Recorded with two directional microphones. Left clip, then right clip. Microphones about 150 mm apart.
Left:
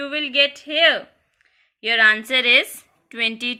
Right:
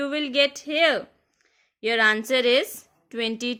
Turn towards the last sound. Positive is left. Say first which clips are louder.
# left 5 dB
turn(degrees=-65)  # may be behind; listen again after turning